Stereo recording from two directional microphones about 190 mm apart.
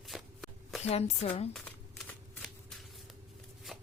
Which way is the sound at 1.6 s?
5° left (ahead or behind).